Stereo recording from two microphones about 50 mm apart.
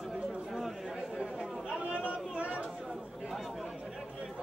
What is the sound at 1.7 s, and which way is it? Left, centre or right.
Chatter, centre.